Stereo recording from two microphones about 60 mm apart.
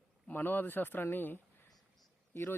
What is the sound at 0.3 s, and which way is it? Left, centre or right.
Speech, left.